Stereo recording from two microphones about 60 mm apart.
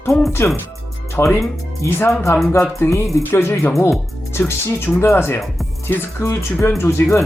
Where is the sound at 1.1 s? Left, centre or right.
Left.